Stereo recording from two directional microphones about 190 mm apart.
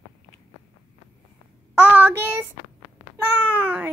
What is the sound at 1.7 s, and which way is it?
Child singing, 10° right (ahead or behind).